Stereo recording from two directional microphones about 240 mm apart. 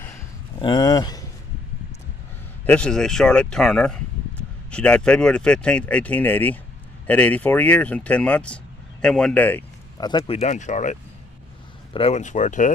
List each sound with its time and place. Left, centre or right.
0.6 s speech: centre
2.6 s speech: centre; by 12.7 s left